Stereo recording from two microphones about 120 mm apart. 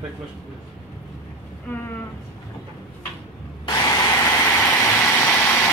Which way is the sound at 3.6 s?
30° left (ahead or behind).